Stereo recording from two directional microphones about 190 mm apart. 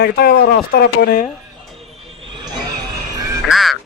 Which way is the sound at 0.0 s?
55° left (ahead or behind).